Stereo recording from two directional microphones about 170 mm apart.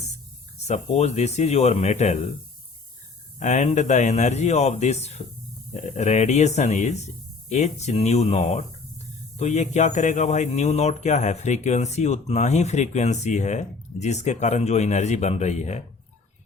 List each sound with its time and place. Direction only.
0.6 s speech: 40° left (ahead or behind)
3.3 s speech: 40° left (ahead or behind)